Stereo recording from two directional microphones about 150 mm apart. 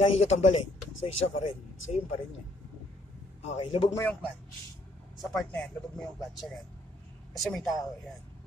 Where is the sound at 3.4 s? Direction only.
45° left (ahead or behind).